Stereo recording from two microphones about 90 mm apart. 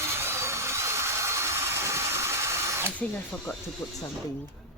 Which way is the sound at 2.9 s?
15° left (ahead or behind).